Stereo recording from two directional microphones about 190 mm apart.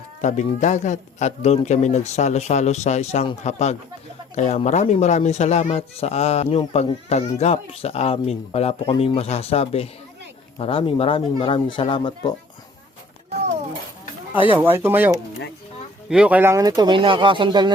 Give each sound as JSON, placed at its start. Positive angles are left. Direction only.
{"t": 0.2, "sound": "speech", "side_deg": 40}
{"t": 14.6, "sound": "speech", "side_deg": -10}